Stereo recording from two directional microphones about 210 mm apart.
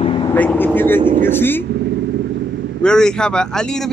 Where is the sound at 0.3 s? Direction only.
10° left (ahead or behind).